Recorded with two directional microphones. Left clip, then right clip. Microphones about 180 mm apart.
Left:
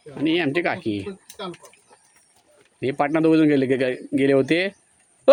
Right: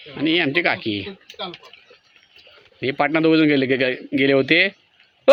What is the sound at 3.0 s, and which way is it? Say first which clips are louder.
Speech: right 2 dB; 10° left (ahead or behind).